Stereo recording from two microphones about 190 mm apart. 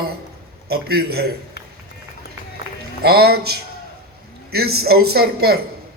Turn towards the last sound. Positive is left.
turn(degrees=-55)  # may be behind; listen again after turning